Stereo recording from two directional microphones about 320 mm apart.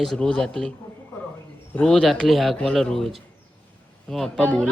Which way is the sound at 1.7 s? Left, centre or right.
Centre.